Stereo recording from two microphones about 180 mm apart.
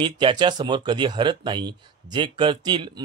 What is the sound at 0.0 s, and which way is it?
Speech, 25° right (ahead or behind).